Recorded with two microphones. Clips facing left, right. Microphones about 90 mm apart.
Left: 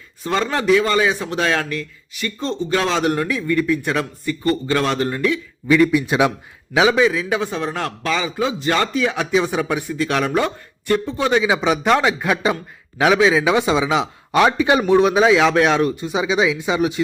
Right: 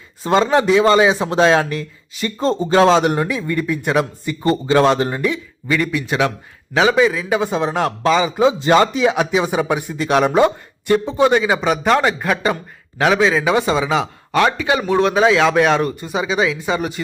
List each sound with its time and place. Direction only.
0.2 s speech: 25° right (ahead or behind)
3.0 s speech: 15° right (ahead or behind)
5.6 s speech: 5° left (ahead or behind)
5.9 s a man's voice: 15° left (ahead or behind)
6.7 s speech: centre (ahead or behind); by 10.9 s 15° right (ahead or behind)
11.2 s speech: centre (ahead or behind)
14.3 s a man's voice: 20° left (ahead or behind)
14.9 s speech: 5° left (ahead or behind)